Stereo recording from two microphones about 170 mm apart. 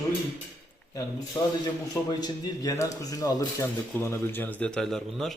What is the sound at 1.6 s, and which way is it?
A man's voice, 25° left (ahead or behind).